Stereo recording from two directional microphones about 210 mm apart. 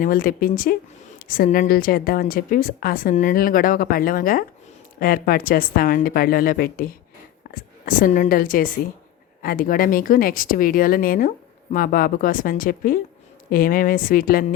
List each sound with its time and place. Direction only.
0.0 s a woman's voice: 45° left (ahead or behind)